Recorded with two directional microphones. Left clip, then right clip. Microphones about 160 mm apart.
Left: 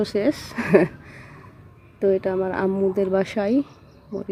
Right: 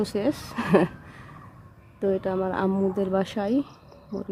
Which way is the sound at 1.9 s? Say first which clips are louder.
Left 5 dB; 5° left (ahead or behind).